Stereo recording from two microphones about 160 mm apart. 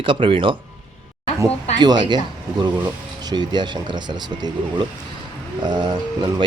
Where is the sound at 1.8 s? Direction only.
25° right (ahead or behind).